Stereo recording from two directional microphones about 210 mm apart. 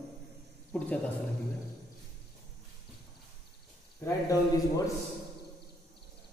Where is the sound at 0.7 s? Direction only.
5° left (ahead or behind).